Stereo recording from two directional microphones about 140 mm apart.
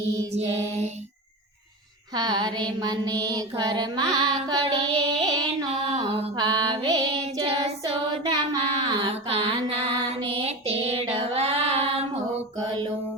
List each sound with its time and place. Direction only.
2.1 s mantra: 30° right (ahead or behind)
4.6 s a sound: 30° right (ahead or behind)
5.8 s music: 40° right (ahead or behind)
7.4 s child singing: 35° right (ahead or behind)
8.8 s mantra: 35° right (ahead or behind)
9.6 s female singing: 40° right (ahead or behind)